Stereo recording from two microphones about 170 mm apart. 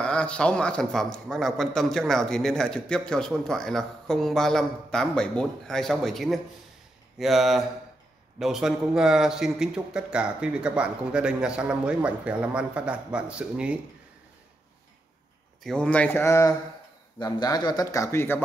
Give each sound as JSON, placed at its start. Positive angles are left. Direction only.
{"t": 0.0, "sound": "a man's voice", "side_deg": 5}
{"t": 15.6, "sound": "speech", "side_deg": 5}